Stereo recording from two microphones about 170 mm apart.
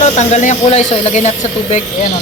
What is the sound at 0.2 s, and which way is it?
Speech, 45° left (ahead or behind).